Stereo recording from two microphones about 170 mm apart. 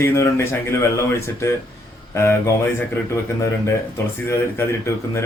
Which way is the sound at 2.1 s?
15° left (ahead or behind).